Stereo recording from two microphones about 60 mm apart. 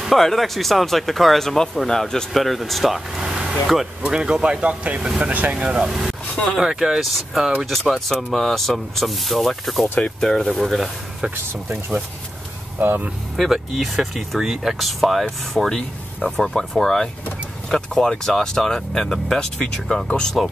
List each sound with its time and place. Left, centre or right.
0.0 s speech: centre; by 5.7 s right
5.7 s speech: centre
6.3 s speech: centre
6.6 s speech: centre
12.7 s speech: right
13.4 s speech: centre